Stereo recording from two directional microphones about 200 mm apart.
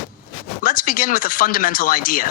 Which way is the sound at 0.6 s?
45° left (ahead or behind).